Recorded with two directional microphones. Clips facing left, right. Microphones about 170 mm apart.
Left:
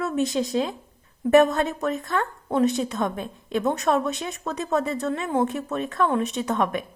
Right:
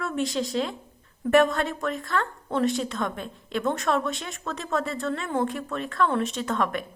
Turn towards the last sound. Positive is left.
turn(degrees=20)  # may be behind; listen again after turning